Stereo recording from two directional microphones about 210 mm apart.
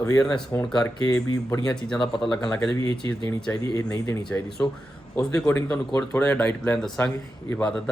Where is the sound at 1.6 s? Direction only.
5° left (ahead or behind).